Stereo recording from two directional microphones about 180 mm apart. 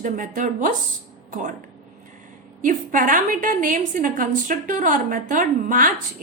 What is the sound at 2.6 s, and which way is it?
A woman's voice, 45° right (ahead or behind).